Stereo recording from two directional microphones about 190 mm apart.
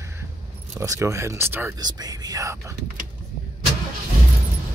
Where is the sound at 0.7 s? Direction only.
20° right (ahead or behind).